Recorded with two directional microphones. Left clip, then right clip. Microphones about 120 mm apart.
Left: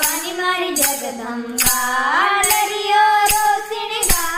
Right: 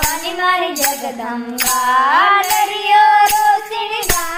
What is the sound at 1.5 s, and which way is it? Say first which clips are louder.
Music: right 5 dB; 25° right (ahead or behind).